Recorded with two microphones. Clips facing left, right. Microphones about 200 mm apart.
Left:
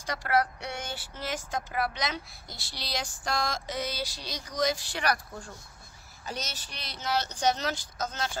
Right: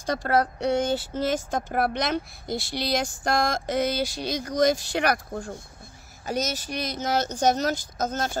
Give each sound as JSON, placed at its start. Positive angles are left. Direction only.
{"t": 0.0, "sound": "speech", "side_deg": -50}
{"t": 1.5, "sound": "speech", "side_deg": -55}